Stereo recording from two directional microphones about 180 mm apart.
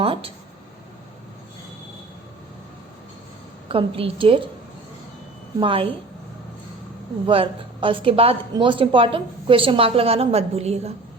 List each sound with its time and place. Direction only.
0.0 s speech: 30° right (ahead or behind)
3.7 s a woman's voice: 30° right (ahead or behind)
5.5 s a woman's voice: 30° right (ahead or behind)
7.3 s a woman's voice: 30° right (ahead or behind)